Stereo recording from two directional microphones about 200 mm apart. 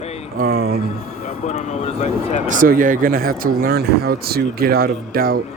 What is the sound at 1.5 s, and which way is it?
Speech, 35° left (ahead or behind).